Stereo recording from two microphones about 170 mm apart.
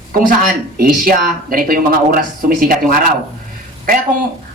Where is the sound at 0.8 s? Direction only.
60° right (ahead or behind).